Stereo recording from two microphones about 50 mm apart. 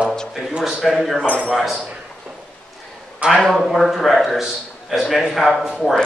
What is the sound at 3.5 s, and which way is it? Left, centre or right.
A man's voice, centre.